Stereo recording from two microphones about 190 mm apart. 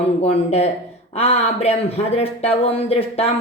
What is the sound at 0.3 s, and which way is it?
Speech, 35° left (ahead or behind).